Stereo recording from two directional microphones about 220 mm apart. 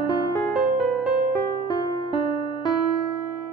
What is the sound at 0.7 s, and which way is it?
Music, centre (ahead or behind).